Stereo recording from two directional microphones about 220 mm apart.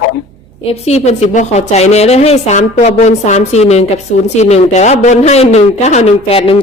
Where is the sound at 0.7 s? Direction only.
30° left (ahead or behind).